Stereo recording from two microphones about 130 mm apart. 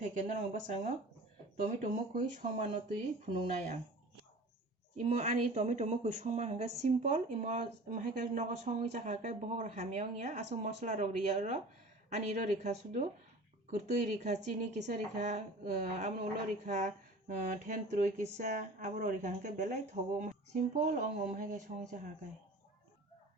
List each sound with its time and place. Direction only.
0.3 s speech: 60° right (ahead or behind)
4.9 s speech: 55° right (ahead or behind); by 19.7 s 80° right
20.7 s speech: 80° right